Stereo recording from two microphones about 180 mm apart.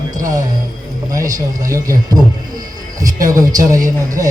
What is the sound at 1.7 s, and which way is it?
Music, 20° right (ahead or behind).